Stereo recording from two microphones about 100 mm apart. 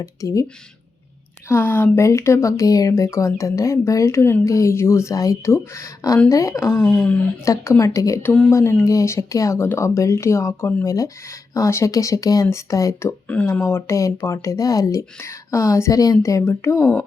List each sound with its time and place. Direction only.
0.0 s speech: 35° left (ahead or behind)
1.5 s speech: 25° left (ahead or behind)
7.4 s speech: 30° left (ahead or behind)
13.2 s speech: 15° left (ahead or behind)
13.5 s speech: 25° left (ahead or behind)